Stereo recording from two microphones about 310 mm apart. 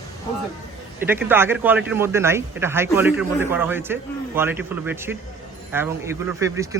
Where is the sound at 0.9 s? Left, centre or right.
Centre.